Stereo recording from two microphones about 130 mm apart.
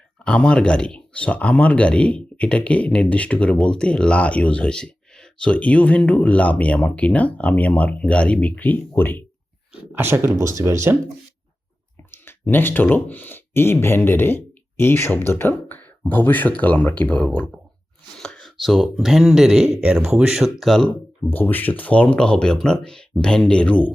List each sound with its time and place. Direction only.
0.3 s speech: 10° left (ahead or behind)
9.9 s speech: 15° right (ahead or behind)
12.1 s speech: 15° left (ahead or behind)
21.2 s speech: 15° left (ahead or behind)